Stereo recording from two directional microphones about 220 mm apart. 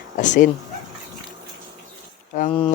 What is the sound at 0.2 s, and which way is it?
Speech, 35° left (ahead or behind).